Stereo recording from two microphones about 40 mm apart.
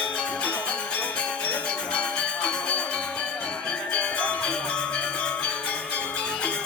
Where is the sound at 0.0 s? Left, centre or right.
Left.